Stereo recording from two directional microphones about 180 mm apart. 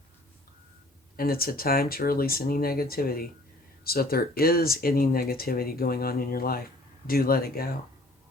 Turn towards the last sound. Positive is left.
turn(degrees=55)  # may be behind; listen again after turning